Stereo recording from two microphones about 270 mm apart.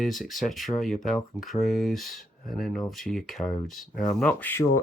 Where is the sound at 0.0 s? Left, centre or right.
Centre.